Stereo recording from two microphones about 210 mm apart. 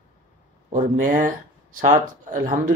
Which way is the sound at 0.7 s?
40° right (ahead or behind).